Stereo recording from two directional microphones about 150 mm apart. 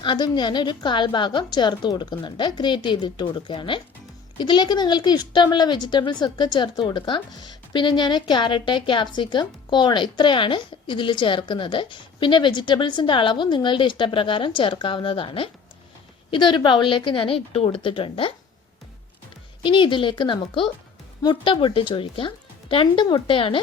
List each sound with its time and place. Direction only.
0.0 s speech: 30° left (ahead or behind)
19.6 s speech: 35° left (ahead or behind)